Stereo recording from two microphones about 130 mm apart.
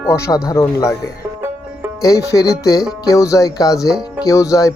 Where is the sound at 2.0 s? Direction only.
25° left (ahead or behind).